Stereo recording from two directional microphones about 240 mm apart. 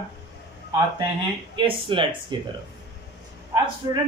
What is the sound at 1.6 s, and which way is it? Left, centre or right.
Speech, centre.